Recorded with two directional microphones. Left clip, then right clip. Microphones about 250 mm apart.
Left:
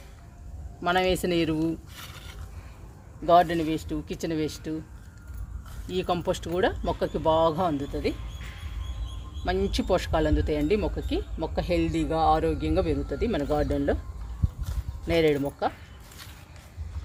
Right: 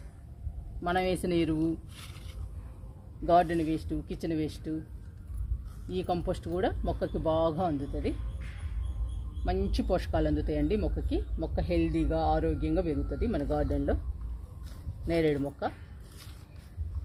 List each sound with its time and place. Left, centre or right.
0.8 s speech: left
3.2 s speech: centre
5.9 s speech: left
9.4 s speech: left
15.0 s speech: left